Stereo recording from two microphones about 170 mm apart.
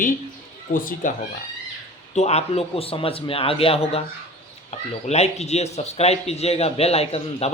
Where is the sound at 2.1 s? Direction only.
40° left (ahead or behind).